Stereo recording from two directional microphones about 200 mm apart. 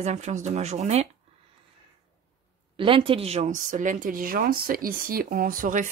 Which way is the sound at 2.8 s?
25° right (ahead or behind).